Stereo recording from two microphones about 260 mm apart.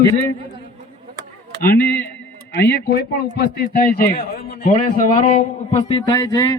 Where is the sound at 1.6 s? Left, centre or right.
Left.